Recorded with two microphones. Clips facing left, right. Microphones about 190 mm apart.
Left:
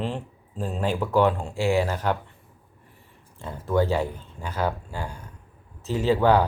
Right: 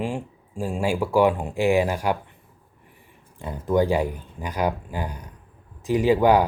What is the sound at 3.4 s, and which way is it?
Speech, 15° right (ahead or behind).